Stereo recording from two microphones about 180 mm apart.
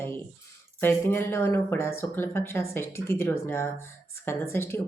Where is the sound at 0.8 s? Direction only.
10° left (ahead or behind).